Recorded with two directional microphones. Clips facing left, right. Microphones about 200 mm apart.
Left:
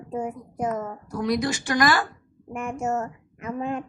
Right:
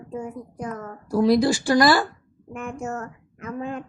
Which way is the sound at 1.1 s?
30° right (ahead or behind).